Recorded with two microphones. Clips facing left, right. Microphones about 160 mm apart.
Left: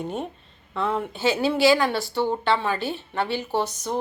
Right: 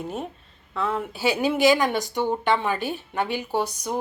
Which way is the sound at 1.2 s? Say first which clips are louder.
Even; 15° right (ahead or behind).